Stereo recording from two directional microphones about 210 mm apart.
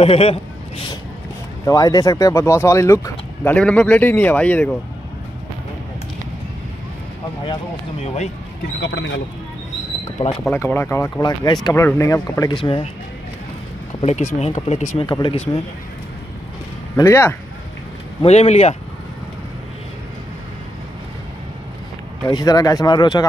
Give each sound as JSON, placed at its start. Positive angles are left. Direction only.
{"t": 0.0, "sound": "speech", "side_deg": 30}
{"t": 1.7, "sound": "speech", "side_deg": 15}
{"t": 8.0, "sound": "speech", "side_deg": 30}
{"t": 8.8, "sound": "speech", "side_deg": 60}
{"t": 10.5, "sound": "speech", "side_deg": 10}
{"t": 14.0, "sound": "speech", "side_deg": 35}
{"t": 15.0, "sound": "speech", "side_deg": 20}
{"t": 16.9, "sound": "speech", "side_deg": 15}
{"t": 18.2, "sound": "speech", "side_deg": 30}
{"t": 22.3, "sound": "speech", "side_deg": 20}